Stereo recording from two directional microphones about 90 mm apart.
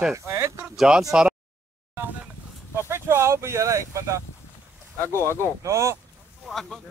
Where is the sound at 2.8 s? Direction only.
25° right (ahead or behind).